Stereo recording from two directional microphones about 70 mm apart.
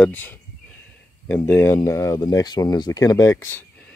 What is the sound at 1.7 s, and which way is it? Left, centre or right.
Speech, left.